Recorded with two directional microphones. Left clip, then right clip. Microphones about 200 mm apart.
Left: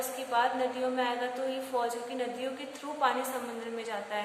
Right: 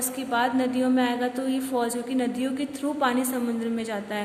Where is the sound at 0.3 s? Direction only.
45° right (ahead or behind).